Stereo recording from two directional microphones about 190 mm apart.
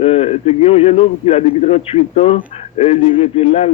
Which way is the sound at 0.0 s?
30° left (ahead or behind).